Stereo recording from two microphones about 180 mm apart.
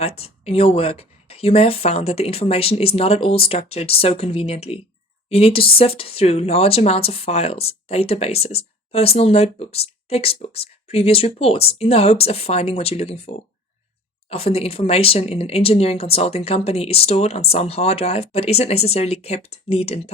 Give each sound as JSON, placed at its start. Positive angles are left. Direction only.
{"t": 0.2, "sound": "speech", "side_deg": 35}